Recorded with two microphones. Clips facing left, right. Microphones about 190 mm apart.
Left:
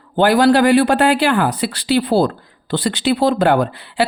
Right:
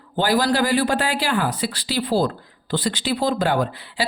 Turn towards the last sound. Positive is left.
turn(degrees=60)  # may be behind; listen again after turning